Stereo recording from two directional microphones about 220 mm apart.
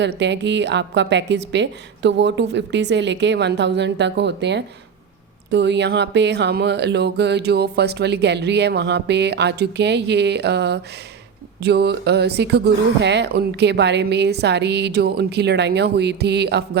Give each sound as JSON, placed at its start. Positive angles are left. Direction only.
{"t": 0.0, "sound": "speech", "side_deg": -50}